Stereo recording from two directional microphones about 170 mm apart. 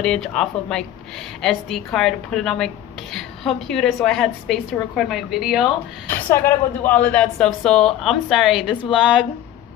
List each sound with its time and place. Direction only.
0.0 s speech: 5° left (ahead or behind)
6.0 s speech: 10° left (ahead or behind); by 9.2 s 5° right (ahead or behind)